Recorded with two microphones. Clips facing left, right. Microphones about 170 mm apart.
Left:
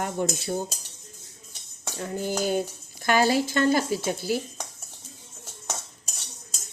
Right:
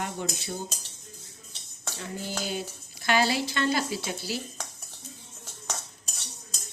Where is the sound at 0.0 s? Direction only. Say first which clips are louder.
Left 6 dB; 45° left (ahead or behind).